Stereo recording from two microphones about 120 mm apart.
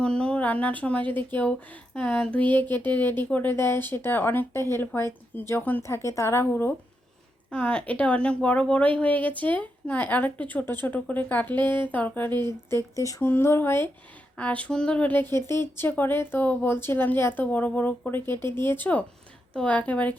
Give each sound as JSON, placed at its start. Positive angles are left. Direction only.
{"t": 0.0, "sound": "speech", "side_deg": 10}